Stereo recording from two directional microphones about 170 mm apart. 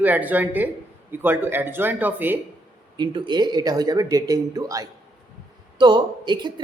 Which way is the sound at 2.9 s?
25° right (ahead or behind).